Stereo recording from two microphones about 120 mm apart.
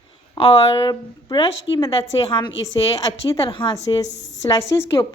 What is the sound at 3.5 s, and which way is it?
Speech, 45° left (ahead or behind).